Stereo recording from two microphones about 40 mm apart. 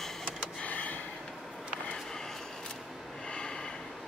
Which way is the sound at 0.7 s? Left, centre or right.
Left.